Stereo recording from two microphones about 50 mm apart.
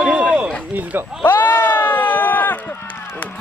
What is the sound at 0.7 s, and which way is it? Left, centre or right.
Speech, right.